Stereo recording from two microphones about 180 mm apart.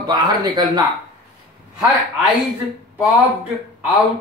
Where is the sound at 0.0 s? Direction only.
25° right (ahead or behind).